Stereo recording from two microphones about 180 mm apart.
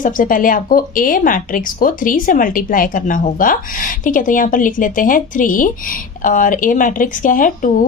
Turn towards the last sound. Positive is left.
turn(degrees=50)  # may be behind; listen again after turning